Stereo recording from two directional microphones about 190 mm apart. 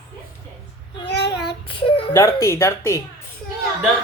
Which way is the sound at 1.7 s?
25° left (ahead or behind).